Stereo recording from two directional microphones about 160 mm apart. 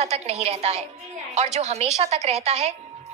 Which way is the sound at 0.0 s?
40° right (ahead or behind).